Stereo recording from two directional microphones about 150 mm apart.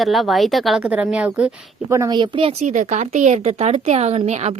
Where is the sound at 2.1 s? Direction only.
35° right (ahead or behind).